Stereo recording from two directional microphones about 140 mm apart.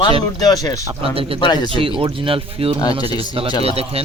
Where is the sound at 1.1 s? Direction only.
40° right (ahead or behind).